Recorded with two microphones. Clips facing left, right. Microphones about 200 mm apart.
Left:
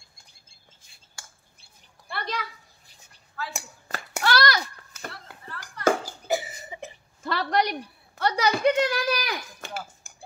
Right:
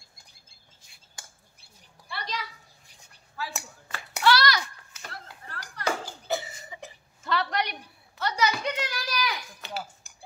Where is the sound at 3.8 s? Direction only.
45° left (ahead or behind).